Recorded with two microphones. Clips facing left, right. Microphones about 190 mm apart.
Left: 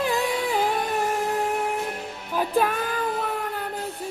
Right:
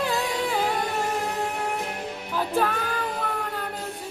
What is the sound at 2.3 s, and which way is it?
Music, 15° left (ahead or behind).